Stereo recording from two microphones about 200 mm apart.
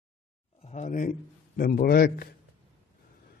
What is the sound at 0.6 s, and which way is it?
A man's voice, 35° left (ahead or behind).